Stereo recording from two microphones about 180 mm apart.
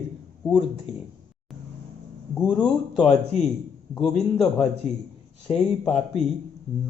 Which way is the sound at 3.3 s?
35° left (ahead or behind).